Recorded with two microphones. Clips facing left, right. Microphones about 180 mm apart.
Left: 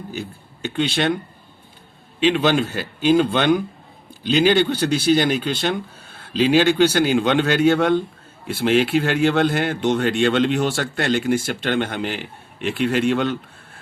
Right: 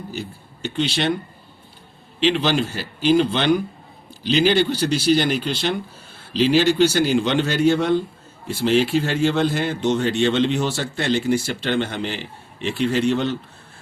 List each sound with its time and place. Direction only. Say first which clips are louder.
0.7 s speech: left 1 dB; 55° left (ahead or behind)
2.3 s speech: left 2 dB; 55° left (ahead or behind)